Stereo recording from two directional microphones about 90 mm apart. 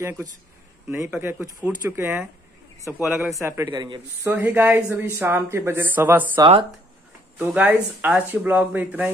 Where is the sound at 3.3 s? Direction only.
35° right (ahead or behind).